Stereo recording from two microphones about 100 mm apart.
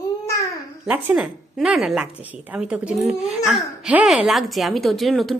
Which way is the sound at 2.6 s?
10° right (ahead or behind).